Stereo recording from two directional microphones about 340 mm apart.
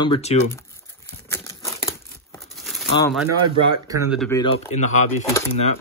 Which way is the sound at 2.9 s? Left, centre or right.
Centre.